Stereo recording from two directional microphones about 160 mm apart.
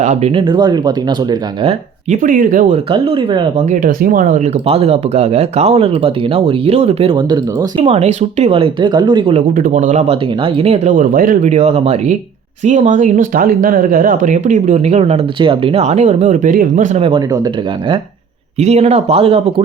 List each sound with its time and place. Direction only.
0.0 s speech: 45° right (ahead or behind); by 1.7 s 25° right (ahead or behind)
2.0 s speech: 55° right (ahead or behind)
2.7 s speech: 35° right (ahead or behind)
3.7 s speech: 60° right (ahead or behind); by 7.9 s 25° right (ahead or behind)
7.9 s speech: 45° right (ahead or behind)
9.6 s speech: 55° right (ahead or behind)
11.5 s speech: 40° right (ahead or behind)
17.0 s speech: 35° right (ahead or behind)
18.6 s speech: 45° right (ahead or behind)